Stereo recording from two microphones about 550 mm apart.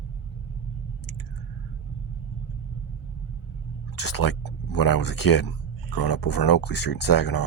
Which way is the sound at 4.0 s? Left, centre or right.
Left.